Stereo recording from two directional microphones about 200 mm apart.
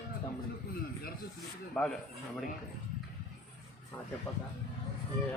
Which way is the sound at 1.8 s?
5° left (ahead or behind).